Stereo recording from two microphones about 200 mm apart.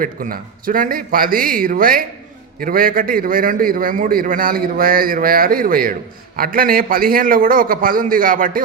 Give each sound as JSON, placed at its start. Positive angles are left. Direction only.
{"t": 0.0, "sound": "a man's voice", "side_deg": -45}